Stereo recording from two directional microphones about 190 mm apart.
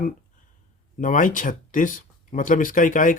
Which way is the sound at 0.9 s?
45° left (ahead or behind).